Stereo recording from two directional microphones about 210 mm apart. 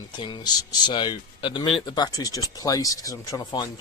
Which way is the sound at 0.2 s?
20° left (ahead or behind).